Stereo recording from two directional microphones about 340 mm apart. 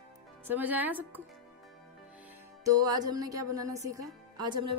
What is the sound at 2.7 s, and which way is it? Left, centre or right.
Speech, centre.